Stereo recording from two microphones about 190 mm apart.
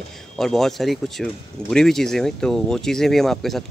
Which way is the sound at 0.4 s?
Centre (ahead or behind).